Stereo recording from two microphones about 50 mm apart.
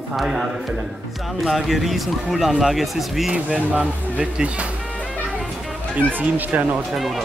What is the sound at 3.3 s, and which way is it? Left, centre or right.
Speech, right.